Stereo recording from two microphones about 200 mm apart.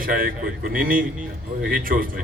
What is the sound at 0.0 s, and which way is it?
A man's voice, 45° right (ahead or behind).